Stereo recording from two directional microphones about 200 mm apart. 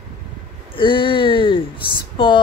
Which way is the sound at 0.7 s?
25° left (ahead or behind).